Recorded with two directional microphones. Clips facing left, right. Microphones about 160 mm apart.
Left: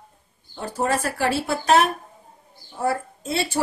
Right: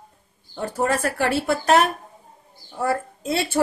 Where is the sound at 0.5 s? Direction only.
55° right (ahead or behind).